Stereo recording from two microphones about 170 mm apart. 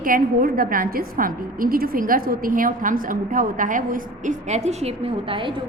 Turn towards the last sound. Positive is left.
turn(degrees=-30)  # may be behind; listen again after turning